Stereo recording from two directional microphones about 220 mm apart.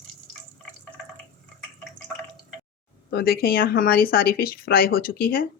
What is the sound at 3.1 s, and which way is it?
Speech, 45° left (ahead or behind).